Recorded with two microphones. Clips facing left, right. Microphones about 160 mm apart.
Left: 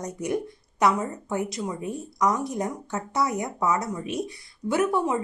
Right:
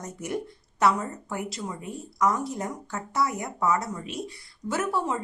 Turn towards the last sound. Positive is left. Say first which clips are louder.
# left 4 dB
turn(degrees=15)  # may be behind; listen again after turning